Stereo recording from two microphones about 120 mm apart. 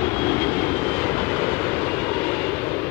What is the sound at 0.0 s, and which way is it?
Vehicle, 15° left (ahead or behind).